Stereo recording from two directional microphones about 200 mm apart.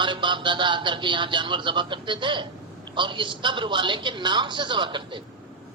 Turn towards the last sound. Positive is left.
turn(degrees=-25)  # may be behind; listen again after turning